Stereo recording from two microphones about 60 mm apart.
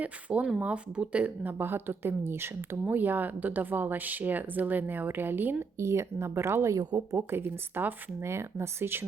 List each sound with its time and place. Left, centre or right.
0.0 s speech: right
1.5 s speech: right
2.9 s speech: right
5.7 s a woman's voice: right
8.2 s a woman's voice: right